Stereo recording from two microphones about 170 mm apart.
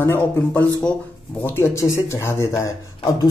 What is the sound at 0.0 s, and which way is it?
Speech, 10° left (ahead or behind).